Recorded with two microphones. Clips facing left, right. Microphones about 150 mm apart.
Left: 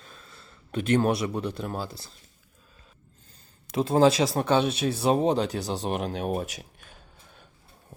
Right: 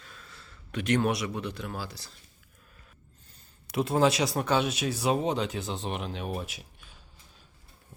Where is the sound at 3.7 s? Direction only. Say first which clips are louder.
Left 4 dB; 30° left (ahead or behind); by 6.9 s 45° left (ahead or behind).